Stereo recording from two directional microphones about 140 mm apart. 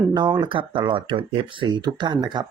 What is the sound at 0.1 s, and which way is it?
Speech, 30° right (ahead or behind).